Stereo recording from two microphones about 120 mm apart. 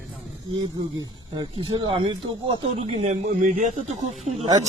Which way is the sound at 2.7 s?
65° right (ahead or behind).